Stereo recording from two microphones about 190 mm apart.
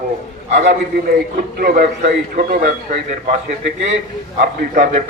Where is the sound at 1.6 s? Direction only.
45° right (ahead or behind).